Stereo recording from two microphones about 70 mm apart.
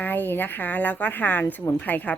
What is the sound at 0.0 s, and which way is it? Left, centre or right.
A woman's voice, left.